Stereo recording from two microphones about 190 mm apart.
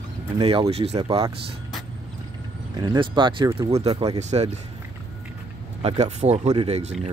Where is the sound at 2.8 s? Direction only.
25° right (ahead or behind).